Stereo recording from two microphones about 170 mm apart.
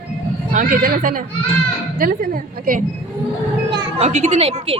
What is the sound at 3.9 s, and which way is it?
Speech, 40° right (ahead or behind).